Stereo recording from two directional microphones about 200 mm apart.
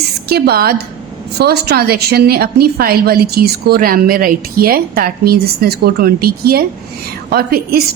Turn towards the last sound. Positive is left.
turn(degrees=-50)  # may be behind; listen again after turning